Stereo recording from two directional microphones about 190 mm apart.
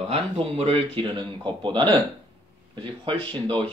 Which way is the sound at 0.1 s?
30° right (ahead or behind).